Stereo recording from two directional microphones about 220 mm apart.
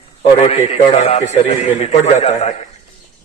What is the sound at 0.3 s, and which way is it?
A man's voice, 25° left (ahead or behind).